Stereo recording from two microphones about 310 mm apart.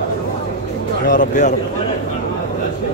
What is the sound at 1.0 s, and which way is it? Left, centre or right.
Speech, left.